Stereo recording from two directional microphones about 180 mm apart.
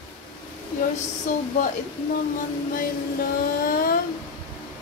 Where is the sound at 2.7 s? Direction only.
50° left (ahead or behind).